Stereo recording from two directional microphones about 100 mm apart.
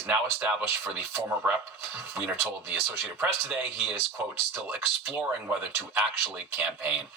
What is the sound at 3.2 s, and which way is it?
Speech, 20° right (ahead or behind).